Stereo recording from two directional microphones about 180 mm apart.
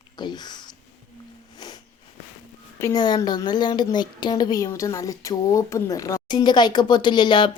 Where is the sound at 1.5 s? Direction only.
25° left (ahead or behind).